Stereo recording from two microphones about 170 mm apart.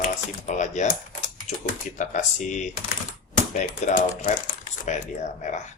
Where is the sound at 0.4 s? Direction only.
45° left (ahead or behind).